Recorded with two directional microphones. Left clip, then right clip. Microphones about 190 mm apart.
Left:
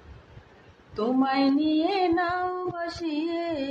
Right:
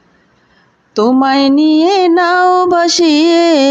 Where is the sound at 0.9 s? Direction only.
60° right (ahead or behind).